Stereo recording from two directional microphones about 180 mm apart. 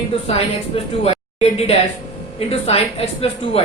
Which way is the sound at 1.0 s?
35° left (ahead or behind).